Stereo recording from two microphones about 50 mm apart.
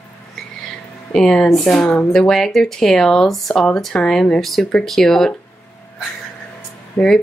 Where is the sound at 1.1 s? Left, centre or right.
Centre.